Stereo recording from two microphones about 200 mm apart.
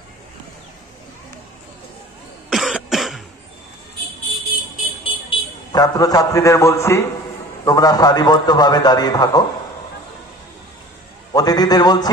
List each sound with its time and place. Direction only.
2.5 s cough: centre (ahead or behind)
5.0 s a man's voice: 20° left (ahead or behind)
11.3 s a man's voice: 20° left (ahead or behind)